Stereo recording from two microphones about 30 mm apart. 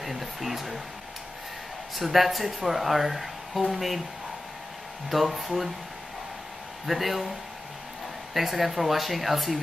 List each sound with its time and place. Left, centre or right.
0.0 s speech: centre
2.0 s speech: centre
5.1 s speech: centre
6.9 s speech: centre
8.4 s speech: centre